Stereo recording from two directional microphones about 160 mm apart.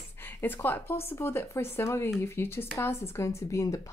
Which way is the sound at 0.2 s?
15° left (ahead or behind).